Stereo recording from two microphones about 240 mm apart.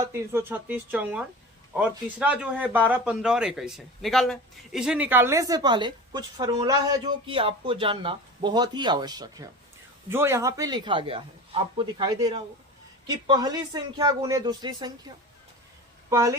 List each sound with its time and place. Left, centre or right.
0.0 s speech: centre